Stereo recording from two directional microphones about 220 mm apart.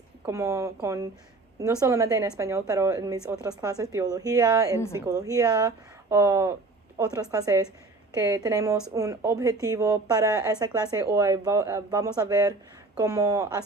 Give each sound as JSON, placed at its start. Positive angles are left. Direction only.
{"t": 0.3, "sound": "a woman's voice", "side_deg": -15}